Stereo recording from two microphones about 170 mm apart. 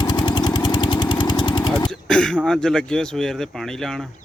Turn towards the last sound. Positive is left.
turn(degrees=5)  # may be behind; listen again after turning